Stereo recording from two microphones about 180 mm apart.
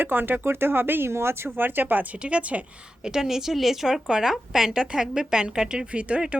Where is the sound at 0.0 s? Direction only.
10° right (ahead or behind).